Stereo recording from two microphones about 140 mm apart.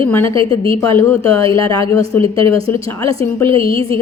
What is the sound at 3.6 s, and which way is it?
Speech, 40° right (ahead or behind).